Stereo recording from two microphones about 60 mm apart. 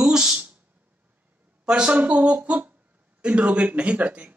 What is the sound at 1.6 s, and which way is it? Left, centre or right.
A man's voice, centre.